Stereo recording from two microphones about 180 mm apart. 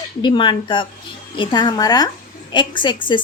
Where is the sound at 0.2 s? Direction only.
25° left (ahead or behind).